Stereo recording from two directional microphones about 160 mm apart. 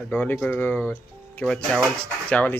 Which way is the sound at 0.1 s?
10° left (ahead or behind).